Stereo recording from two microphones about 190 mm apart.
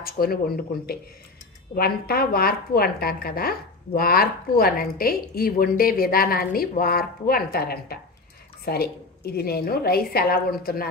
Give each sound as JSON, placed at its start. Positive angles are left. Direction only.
{"t": 0.0, "sound": "speech", "side_deg": 50}
{"t": 1.8, "sound": "speech", "side_deg": 55}